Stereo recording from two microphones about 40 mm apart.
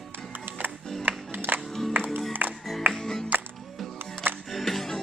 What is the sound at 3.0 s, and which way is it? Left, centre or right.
Music, centre.